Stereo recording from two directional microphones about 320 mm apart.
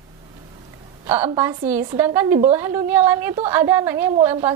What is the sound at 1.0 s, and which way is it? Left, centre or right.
A woman's voice, centre.